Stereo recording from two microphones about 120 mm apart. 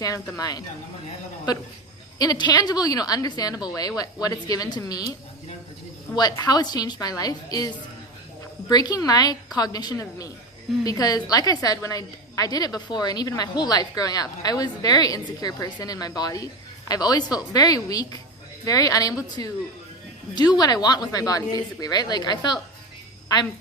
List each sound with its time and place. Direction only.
0.3 s a woman's voice: 30° left (ahead or behind)
2.1 s a woman's voice: 35° left (ahead or behind)
6.1 s a woman's voice: 30° left (ahead or behind)
8.7 s a woman's voice: 35° left (ahead or behind)